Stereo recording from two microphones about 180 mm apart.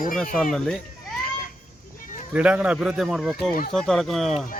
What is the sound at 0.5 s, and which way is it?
Speech, 5° left (ahead or behind).